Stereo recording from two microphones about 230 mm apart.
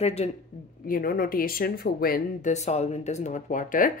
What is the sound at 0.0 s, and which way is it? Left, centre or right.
Speech, left.